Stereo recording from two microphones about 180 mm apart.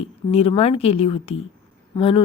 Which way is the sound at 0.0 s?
35° left (ahead or behind).